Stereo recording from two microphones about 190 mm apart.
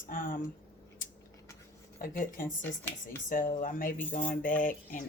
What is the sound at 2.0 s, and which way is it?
Speech, 45° left (ahead or behind).